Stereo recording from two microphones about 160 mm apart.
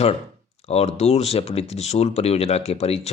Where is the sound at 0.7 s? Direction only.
40° left (ahead or behind).